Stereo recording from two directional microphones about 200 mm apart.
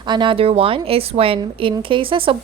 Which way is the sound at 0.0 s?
20° right (ahead or behind).